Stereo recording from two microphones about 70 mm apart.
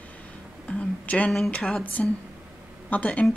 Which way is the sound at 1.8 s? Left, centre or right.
Left.